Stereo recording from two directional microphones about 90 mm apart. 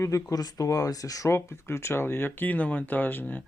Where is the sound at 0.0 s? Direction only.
40° left (ahead or behind).